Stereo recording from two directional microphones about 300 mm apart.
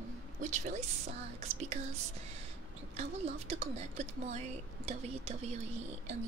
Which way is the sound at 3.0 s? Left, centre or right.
Right.